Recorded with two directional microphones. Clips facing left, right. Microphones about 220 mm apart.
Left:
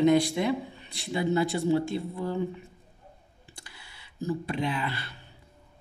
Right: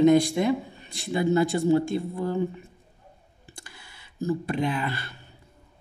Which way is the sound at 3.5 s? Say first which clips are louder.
Right 3 dB; 50° right (ahead or behind).